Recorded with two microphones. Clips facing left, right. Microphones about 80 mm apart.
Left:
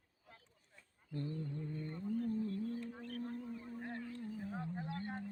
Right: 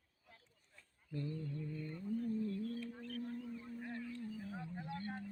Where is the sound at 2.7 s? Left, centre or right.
Left.